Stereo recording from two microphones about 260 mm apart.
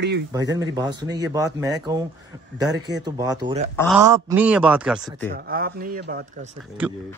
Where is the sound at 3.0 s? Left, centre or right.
Centre.